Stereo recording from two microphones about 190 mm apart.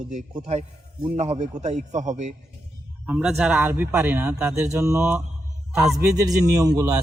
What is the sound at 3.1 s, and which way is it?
A man's voice, 5° right (ahead or behind).